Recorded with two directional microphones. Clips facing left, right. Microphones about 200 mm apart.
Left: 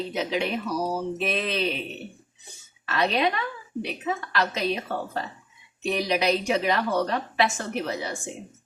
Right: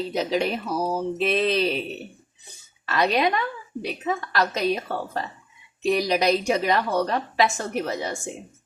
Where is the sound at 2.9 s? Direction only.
35° right (ahead or behind).